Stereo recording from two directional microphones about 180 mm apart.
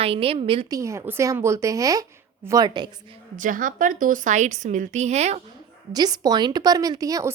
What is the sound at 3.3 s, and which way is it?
A woman's voice, 45° right (ahead or behind).